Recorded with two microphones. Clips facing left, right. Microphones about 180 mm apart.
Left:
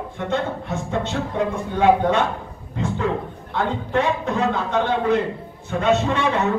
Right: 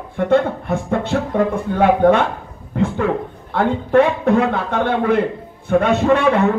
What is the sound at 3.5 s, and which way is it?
Speech, 55° right (ahead or behind).